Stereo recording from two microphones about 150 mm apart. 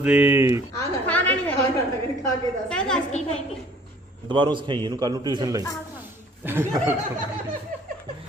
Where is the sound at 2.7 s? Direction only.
5° left (ahead or behind).